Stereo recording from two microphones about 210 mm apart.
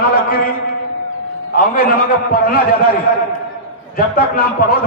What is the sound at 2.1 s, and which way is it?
Speech, 45° left (ahead or behind).